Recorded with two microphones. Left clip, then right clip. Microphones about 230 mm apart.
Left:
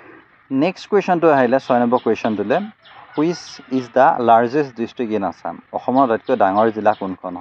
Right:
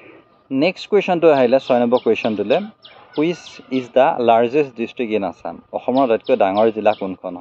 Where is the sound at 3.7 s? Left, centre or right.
Left.